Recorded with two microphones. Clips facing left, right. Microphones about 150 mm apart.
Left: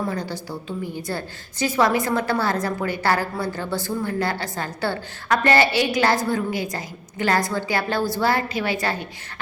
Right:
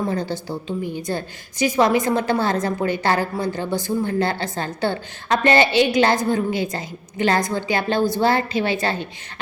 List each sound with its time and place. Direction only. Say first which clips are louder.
0.1 s a woman's voice: right 4 dB; 25° right (ahead or behind)